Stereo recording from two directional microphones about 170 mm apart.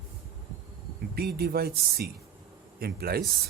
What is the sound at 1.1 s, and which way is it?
Speech, 70° right (ahead or behind).